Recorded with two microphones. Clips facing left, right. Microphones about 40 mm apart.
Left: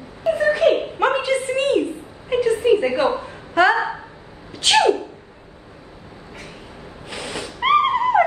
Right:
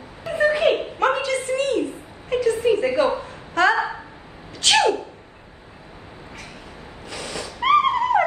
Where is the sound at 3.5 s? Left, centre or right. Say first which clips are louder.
Left 2 dB; centre.